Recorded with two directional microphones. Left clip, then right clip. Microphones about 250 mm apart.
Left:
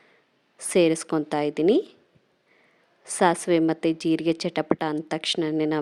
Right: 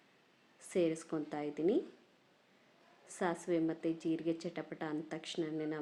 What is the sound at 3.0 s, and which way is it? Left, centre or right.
A woman's voice, left.